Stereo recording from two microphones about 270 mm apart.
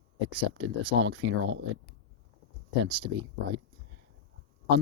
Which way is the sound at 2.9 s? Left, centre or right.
Centre.